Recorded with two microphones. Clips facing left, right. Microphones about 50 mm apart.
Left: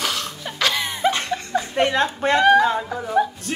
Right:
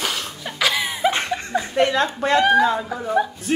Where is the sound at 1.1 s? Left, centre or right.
Right.